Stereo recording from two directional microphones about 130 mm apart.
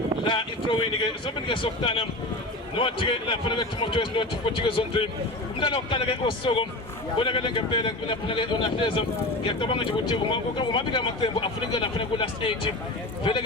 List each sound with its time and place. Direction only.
0.3 s a man's voice: 40° left (ahead or behind)